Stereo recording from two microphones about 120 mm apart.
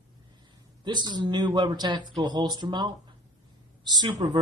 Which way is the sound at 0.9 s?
35° right (ahead or behind).